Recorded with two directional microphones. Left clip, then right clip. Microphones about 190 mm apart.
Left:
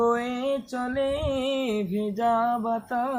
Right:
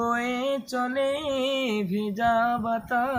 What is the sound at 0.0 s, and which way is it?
Music, 50° right (ahead or behind).